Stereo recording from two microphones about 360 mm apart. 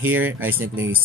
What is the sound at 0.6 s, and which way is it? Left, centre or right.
Speech, right.